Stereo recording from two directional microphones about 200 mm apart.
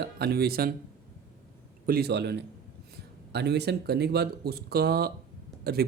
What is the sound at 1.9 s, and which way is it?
A man's voice, 55° right (ahead or behind).